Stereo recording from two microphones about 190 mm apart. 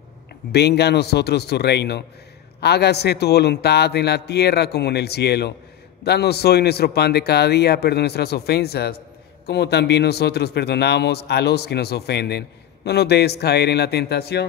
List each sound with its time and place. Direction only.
0.5 s a man's voice: 60° left (ahead or behind)